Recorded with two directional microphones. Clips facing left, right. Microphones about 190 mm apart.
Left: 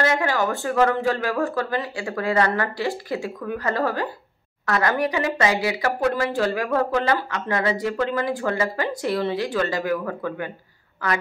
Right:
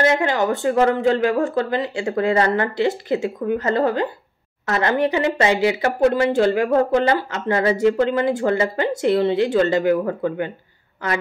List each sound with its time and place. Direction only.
0.0 s speech: 20° right (ahead or behind)